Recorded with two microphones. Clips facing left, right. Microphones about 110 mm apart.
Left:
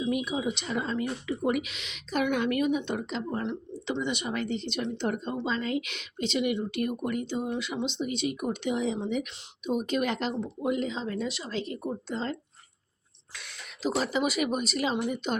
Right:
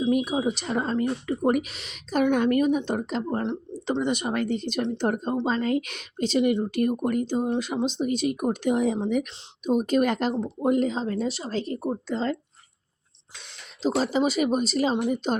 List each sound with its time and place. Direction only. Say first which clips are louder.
0.0 s a woman's voice: right 5 dB; 40° right (ahead or behind)
13.3 s a woman's voice: left 1 dB; 25° right (ahead or behind)